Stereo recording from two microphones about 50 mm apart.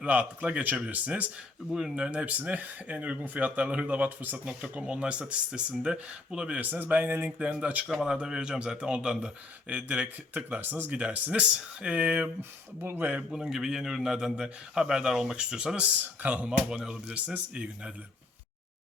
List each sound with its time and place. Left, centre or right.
0.0 s a man's voice: right
1.7 s a man's voice: centre
2.0 s speech: right
4.6 s a man's voice: right
6.6 s a man's voice: right
7.3 s speech: right
8.0 s a man's voice: centre
10.3 s a man's voice: right
11.0 s speech: right
12.8 s speech: right
13.3 s a man's voice: centre
16.2 s a man's voice: right
16.5 s a man's voice: centre
17.1 s speech: right